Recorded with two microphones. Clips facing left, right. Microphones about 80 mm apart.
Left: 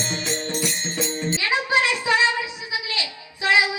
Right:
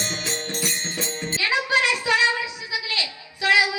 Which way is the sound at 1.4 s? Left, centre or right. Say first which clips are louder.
Even; left.